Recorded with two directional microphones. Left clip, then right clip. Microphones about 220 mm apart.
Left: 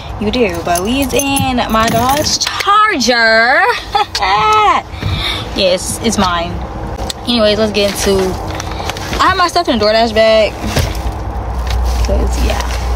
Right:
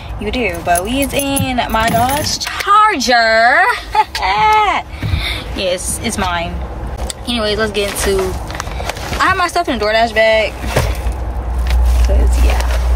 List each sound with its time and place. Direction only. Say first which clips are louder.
0.2 s speech: left 4 dB; 15° left (ahead or behind)
9.2 s speech: left 2 dB; 10° left (ahead or behind)